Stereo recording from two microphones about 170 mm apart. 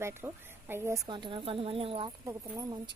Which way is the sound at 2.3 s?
20° right (ahead or behind).